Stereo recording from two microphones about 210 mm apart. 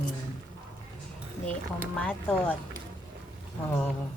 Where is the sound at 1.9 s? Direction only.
5° left (ahead or behind).